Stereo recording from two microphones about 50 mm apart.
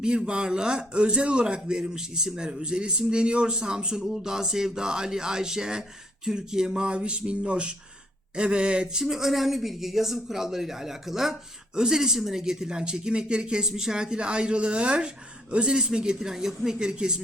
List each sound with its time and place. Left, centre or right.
0.0 s speech: centre
6.2 s a sound: centre
8.4 s speech: right